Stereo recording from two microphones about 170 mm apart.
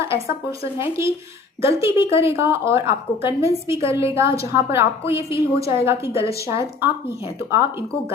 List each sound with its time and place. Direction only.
0.0 s a woman's voice: 15° right (ahead or behind)